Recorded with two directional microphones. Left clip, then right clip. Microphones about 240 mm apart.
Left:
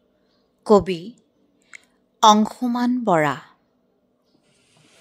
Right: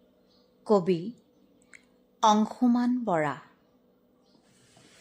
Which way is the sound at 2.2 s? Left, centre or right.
Left.